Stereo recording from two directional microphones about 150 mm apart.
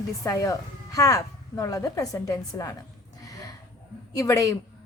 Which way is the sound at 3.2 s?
25° left (ahead or behind).